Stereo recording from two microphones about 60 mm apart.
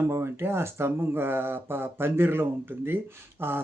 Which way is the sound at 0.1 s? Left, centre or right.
Right.